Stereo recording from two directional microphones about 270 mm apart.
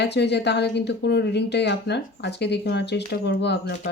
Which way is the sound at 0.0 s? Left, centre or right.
Left.